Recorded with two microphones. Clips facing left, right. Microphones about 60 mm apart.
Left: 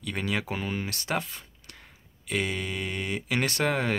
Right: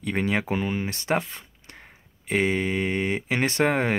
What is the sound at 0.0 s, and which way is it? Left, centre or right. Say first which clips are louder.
Speech: right 5 dB; right.